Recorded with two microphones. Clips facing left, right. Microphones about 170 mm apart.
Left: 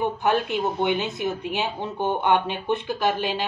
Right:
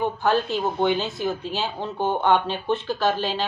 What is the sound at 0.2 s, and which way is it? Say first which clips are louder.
Speech: right 1 dB; 20° left (ahead or behind).